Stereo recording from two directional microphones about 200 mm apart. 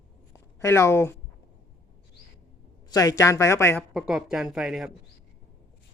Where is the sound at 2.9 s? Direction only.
15° left (ahead or behind).